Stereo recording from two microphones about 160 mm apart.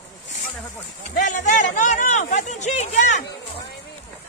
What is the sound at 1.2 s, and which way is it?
Speech, 50° left (ahead or behind).